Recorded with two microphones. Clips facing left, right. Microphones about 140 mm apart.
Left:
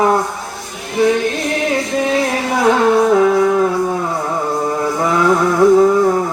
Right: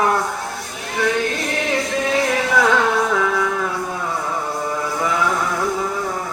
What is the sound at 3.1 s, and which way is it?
Music, 35° left (ahead or behind).